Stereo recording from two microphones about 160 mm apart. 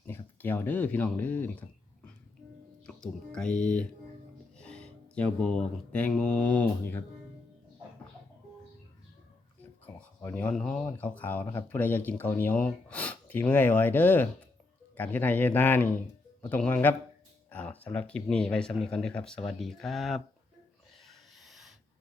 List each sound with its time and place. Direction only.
0.0 s speech: 10° left (ahead or behind)
2.8 s speech: 5° left (ahead or behind)
9.6 s a sound: 10° left (ahead or behind)
10.8 s speech: 10° left (ahead or behind)
21.1 s rub: centre (ahead or behind)